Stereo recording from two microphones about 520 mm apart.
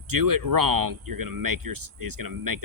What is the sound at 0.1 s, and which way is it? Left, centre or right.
Speech, right.